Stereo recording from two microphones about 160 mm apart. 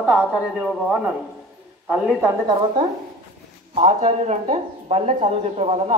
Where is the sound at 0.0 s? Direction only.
10° right (ahead or behind).